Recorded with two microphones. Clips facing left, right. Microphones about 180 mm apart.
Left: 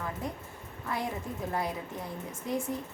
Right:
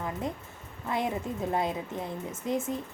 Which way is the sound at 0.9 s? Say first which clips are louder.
Right 4 dB; 20° right (ahead or behind).